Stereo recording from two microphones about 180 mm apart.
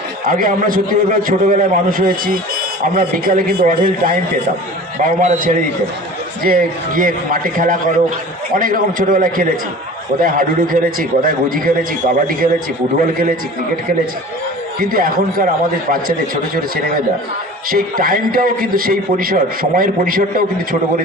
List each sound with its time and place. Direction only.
0.3 s a man's voice: 50° right (ahead or behind)
14.8 s a man's voice: 55° right (ahead or behind)